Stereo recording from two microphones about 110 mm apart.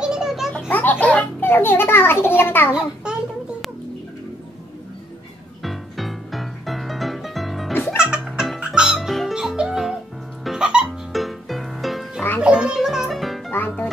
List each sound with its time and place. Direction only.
0.0 s a sound: 5° right (ahead or behind)
0.7 s a child's voice: 15° left (ahead or behind)
2.7 s a child's voice: 10° right (ahead or behind)
5.6 s music: centre (ahead or behind)
7.7 s music: 20° left (ahead or behind)
8.0 s music: 5° right (ahead or behind)